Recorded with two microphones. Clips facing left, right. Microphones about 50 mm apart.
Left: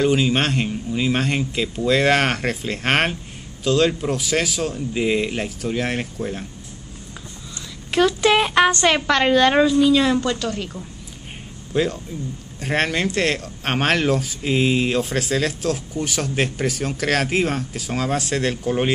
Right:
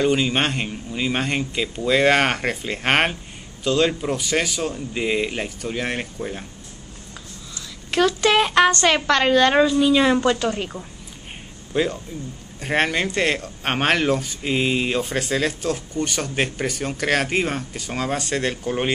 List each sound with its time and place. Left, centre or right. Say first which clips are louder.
0.0 s speech: left 1 dB; centre
7.9 s speech: left 1 dB; centre
9.8 s a woman's voice: even; centre
11.7 s speech: left 1 dB; centre